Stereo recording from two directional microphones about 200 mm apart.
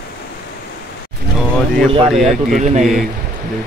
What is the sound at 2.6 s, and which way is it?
Speech, 35° right (ahead or behind).